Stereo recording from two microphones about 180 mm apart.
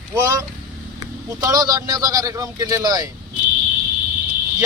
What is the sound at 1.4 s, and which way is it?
Speech, 20° right (ahead or behind).